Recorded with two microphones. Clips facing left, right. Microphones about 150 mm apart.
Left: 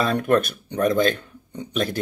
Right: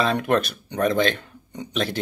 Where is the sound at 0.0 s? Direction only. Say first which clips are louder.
Left 1 dB; 50° left (ahead or behind).